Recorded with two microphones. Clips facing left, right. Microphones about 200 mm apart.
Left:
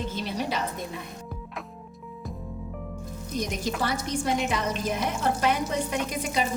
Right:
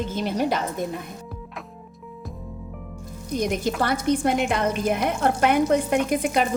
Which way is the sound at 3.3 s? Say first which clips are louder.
Right 6 dB; 55° right (ahead or behind).